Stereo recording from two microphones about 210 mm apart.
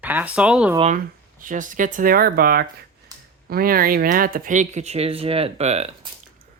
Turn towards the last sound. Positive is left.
turn(degrees=-30)  # may be behind; listen again after turning